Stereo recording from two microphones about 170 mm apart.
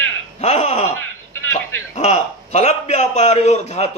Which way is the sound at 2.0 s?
40° left (ahead or behind).